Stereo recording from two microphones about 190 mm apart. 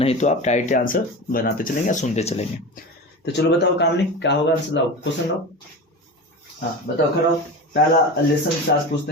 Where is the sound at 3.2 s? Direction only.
65° left (ahead or behind).